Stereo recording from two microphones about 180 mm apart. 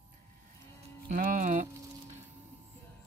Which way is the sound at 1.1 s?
45° right (ahead or behind).